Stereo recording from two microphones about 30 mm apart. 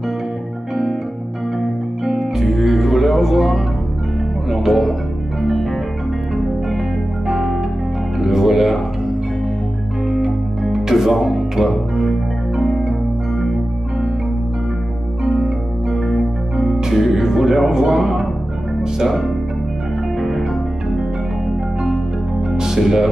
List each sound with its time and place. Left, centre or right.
1.6 s music: centre
4.5 s speech: centre
5.4 s music: centre
7.2 s music: centre
10.0 s music: centre
12.1 s music: centre
15.4 s music: centre
17.6 s a sound: right
18.9 s music: centre
22.6 s music: centre